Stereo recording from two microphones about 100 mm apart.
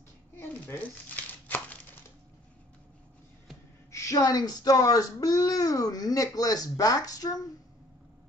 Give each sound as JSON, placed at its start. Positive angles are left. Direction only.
{"t": 0.4, "sound": "crumpling", "side_deg": 20}
{"t": 3.9, "sound": "speech", "side_deg": 35}